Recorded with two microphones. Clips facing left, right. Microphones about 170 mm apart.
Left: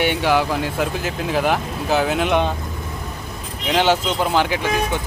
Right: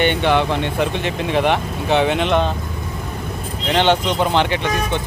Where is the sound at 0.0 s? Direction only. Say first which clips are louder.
Right 2 dB; 5° left (ahead or behind).